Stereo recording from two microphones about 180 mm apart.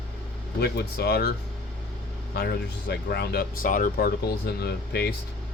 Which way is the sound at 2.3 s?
60° left (ahead or behind).